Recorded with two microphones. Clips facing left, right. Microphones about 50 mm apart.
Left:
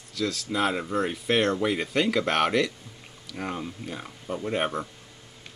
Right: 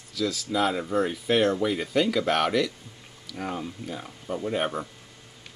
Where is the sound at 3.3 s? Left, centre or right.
Centre.